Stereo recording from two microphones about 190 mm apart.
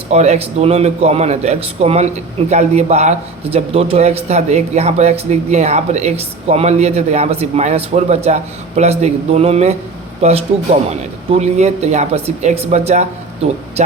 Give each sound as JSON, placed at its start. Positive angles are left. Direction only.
{"t": 0.1, "sound": "a man's voice", "side_deg": -35}